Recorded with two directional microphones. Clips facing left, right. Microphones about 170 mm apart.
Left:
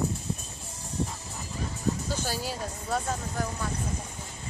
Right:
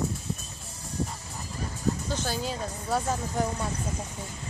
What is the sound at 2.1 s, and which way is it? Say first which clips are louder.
Speech: right 1 dB; 10° left (ahead or behind).